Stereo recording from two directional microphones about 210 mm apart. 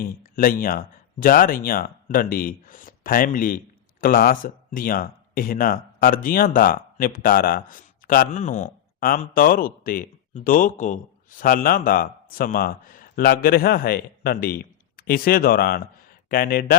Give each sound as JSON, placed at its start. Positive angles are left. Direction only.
{"t": 0.0, "sound": "speech", "side_deg": 40}